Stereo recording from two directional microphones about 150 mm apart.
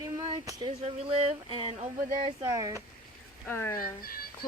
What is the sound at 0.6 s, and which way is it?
Speech, 40° right (ahead or behind).